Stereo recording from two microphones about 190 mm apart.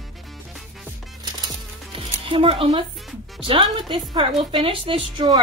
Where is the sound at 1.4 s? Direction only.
25° right (ahead or behind).